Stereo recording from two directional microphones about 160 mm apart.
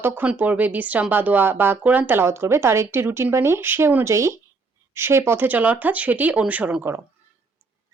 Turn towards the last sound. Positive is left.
turn(degrees=-10)  # may be behind; listen again after turning